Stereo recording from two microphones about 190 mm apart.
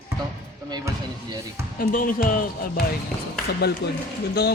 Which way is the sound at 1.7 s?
45° left (ahead or behind).